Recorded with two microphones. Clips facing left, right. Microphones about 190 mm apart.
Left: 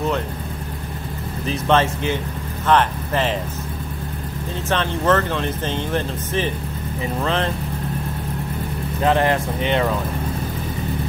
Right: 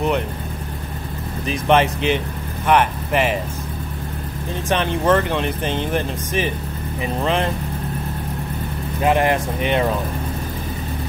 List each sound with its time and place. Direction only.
1.5 s speech: 15° right (ahead or behind)
4.6 s speech: 15° right (ahead or behind)
9.0 s speech: 15° right (ahead or behind)